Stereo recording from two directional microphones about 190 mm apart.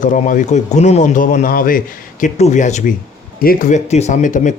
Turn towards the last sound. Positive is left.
turn(degrees=40)  # may be behind; listen again after turning